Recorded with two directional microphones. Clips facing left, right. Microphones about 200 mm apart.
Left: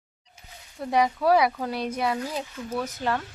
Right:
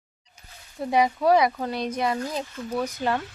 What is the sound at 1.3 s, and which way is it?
Speech, 5° left (ahead or behind).